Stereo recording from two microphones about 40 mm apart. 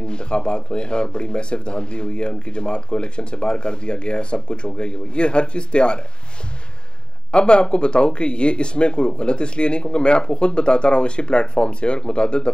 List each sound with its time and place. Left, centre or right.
0.0 s speech: left
7.2 s speech: left